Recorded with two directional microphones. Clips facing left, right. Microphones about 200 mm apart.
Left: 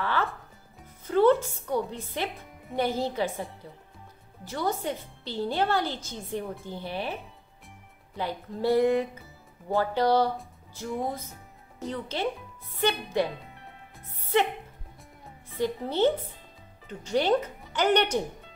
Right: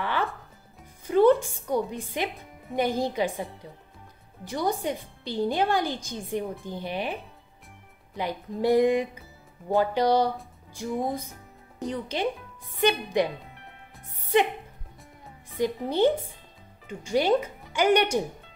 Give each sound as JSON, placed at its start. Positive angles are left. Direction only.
{"t": 0.0, "sound": "music", "side_deg": -15}
{"t": 1.0, "sound": "a woman's voice", "side_deg": -15}
{"t": 2.3, "sound": "music", "side_deg": 0}
{"t": 2.7, "sound": "a woman's voice", "side_deg": -15}
{"t": 4.5, "sound": "a woman's voice", "side_deg": -15}
{"t": 11.8, "sound": "a woman's voice", "side_deg": -15}
{"t": 14.2, "sound": "music", "side_deg": -15}
{"t": 15.5, "sound": "a woman's voice", "side_deg": -15}